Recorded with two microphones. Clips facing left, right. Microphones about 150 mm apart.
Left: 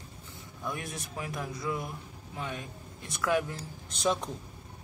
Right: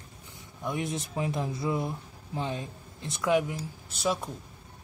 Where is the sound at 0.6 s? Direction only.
20° right (ahead or behind).